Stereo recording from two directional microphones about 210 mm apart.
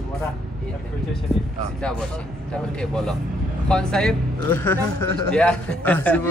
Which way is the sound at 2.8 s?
5° left (ahead or behind).